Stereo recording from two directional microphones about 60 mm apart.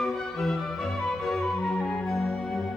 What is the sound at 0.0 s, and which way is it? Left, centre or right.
Music, centre.